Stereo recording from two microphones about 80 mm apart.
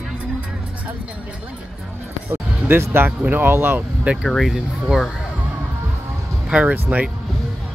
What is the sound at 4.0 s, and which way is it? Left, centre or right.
Speech, centre.